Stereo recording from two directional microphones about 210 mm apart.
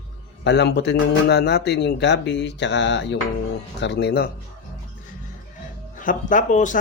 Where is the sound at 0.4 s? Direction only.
55° left (ahead or behind).